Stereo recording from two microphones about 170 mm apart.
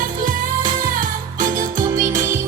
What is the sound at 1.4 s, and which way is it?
Music, 50° right (ahead or behind).